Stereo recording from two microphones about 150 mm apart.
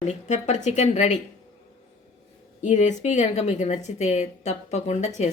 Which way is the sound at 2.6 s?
50° left (ahead or behind).